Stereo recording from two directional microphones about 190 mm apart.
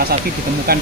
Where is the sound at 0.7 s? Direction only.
50° right (ahead or behind).